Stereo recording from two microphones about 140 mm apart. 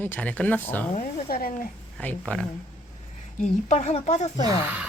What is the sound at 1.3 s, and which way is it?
Speech, 90° left.